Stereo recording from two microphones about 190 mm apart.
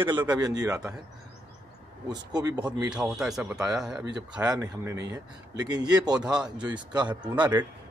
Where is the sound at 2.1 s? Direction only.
20° right (ahead or behind).